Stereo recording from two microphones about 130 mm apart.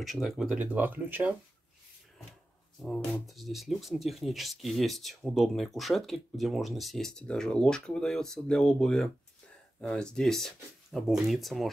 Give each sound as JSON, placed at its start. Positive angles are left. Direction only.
{"t": 0.0, "sound": "speech", "side_deg": 0}
{"t": 2.8, "sound": "speech", "side_deg": 0}